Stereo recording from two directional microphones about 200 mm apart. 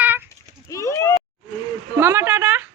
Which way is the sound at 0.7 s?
15° left (ahead or behind).